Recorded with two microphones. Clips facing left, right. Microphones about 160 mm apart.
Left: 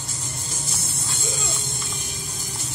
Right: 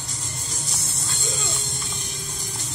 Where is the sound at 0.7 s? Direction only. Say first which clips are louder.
Left 1 dB; centre (ahead or behind).